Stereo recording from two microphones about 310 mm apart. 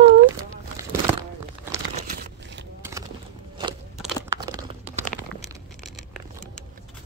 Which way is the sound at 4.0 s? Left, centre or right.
Centre.